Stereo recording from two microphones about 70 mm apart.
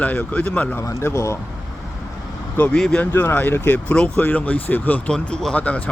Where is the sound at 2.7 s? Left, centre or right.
Centre.